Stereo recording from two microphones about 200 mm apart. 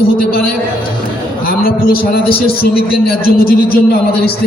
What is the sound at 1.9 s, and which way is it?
A man's voice, 50° left (ahead or behind).